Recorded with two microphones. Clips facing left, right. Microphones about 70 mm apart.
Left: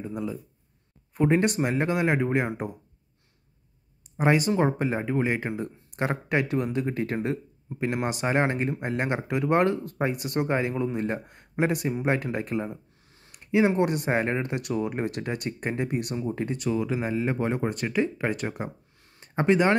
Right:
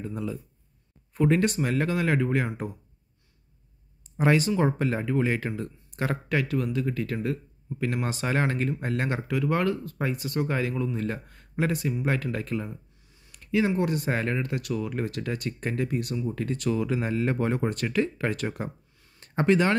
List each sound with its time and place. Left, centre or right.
0.0 s speech: centre
4.2 s speech: centre
16.6 s speech: centre